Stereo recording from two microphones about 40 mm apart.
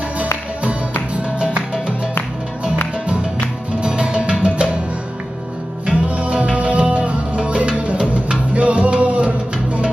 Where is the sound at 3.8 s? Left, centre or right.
Right.